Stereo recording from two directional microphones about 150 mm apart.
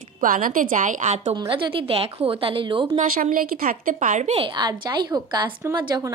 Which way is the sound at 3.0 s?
65° right (ahead or behind).